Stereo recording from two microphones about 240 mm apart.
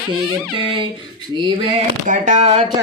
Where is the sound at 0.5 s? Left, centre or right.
Right.